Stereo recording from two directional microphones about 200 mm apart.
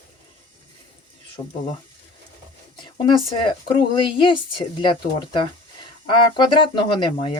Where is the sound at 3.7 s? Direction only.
25° left (ahead or behind).